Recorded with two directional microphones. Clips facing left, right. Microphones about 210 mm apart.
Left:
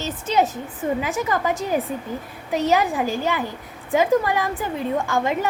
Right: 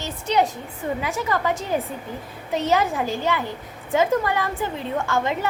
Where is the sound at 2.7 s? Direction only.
15° left (ahead or behind).